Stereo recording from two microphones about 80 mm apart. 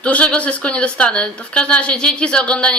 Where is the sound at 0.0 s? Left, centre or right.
Centre.